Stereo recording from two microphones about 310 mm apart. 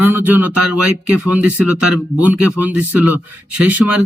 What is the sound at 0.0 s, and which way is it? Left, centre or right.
Speech, centre.